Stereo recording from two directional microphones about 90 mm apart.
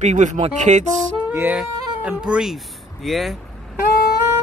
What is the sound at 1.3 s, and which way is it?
Speech, 25° right (ahead or behind).